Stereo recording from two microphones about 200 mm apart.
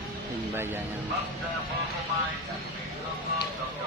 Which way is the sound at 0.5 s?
10° right (ahead or behind).